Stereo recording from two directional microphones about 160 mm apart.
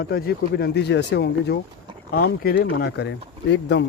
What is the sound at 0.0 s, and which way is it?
Speech, 80° left.